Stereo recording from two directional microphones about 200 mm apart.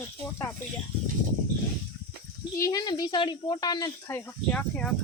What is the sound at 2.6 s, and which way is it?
Speech, 20° left (ahead or behind).